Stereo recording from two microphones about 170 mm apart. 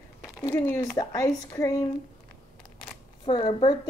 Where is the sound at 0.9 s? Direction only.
20° left (ahead or behind).